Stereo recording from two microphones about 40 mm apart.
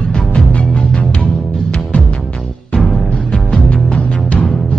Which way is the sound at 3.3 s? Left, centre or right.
Left.